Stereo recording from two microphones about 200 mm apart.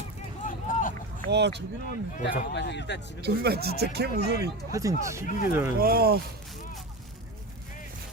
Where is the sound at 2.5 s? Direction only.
60° left (ahead or behind).